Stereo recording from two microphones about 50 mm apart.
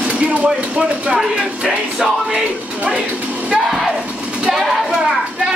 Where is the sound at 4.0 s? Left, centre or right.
Right.